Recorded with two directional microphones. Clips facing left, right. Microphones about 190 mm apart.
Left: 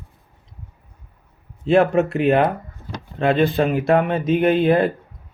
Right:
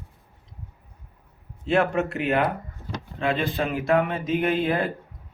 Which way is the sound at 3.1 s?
60° left (ahead or behind).